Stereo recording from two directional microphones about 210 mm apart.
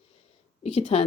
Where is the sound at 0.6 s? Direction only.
30° left (ahead or behind).